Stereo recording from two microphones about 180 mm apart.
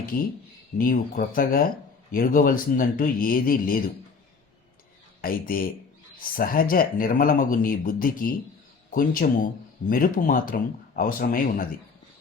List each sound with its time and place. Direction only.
0.8 s speech: 50° left (ahead or behind)
5.2 s speech: 55° left (ahead or behind)